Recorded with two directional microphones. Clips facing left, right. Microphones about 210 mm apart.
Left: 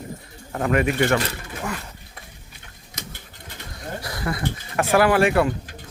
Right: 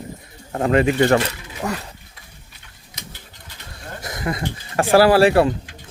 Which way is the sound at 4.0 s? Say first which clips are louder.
Right 2 dB; 20° right (ahead or behind).